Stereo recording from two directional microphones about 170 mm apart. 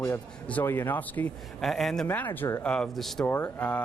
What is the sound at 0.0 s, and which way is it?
A man's voice, 15° left (ahead or behind).